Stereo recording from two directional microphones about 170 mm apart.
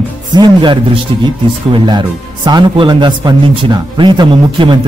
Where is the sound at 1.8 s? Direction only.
25° right (ahead or behind).